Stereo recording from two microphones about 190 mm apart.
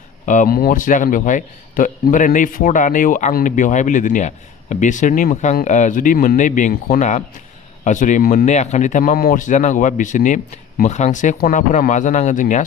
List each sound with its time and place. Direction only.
0.3 s speech: 45° left (ahead or behind)